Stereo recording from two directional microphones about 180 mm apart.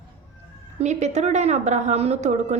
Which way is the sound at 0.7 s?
40° right (ahead or behind).